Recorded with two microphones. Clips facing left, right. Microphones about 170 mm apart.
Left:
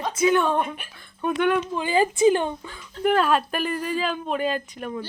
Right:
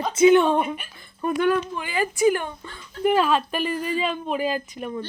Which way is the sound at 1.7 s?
25° left (ahead or behind).